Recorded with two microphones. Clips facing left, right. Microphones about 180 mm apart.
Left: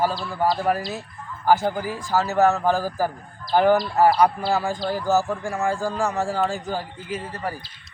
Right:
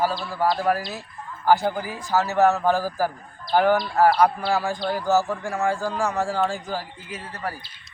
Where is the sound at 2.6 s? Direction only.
15° left (ahead or behind).